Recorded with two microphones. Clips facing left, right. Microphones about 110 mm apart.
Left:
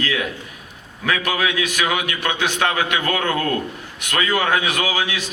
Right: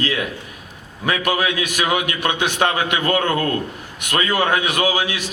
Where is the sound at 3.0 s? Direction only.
35° right (ahead or behind).